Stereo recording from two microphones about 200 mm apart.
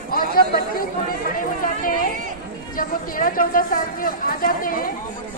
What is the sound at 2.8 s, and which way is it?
A woman's voice, 45° left (ahead or behind).